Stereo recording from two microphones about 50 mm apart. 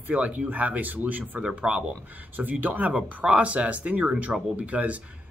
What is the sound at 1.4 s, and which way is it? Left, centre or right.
Speech, centre.